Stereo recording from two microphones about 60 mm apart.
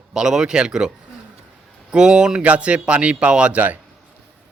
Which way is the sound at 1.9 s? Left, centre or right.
Centre.